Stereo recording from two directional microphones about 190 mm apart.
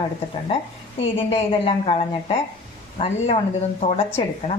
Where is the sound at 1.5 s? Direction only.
30° left (ahead or behind).